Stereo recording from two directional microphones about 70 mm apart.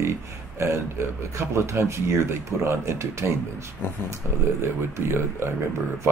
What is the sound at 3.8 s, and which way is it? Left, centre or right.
Speech, left.